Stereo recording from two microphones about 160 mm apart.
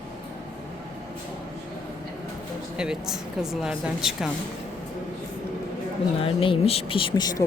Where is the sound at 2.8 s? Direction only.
5° right (ahead or behind).